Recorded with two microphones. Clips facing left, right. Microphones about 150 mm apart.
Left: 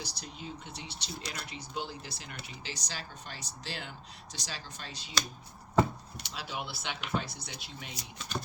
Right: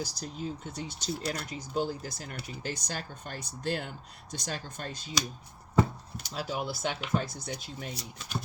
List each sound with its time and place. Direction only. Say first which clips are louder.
0.0 s speech: right 7 dB; 40° right (ahead or behind)
6.2 s speech: right 6 dB; 45° right (ahead or behind)